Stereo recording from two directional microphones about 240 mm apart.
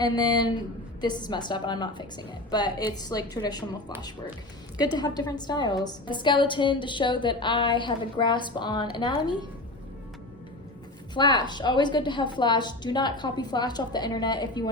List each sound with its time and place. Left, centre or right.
0.0 s a woman's voice: centre
4.9 s a woman's voice: centre
11.1 s a woman's voice: centre